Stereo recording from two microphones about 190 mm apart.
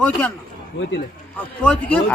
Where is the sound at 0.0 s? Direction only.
10° left (ahead or behind).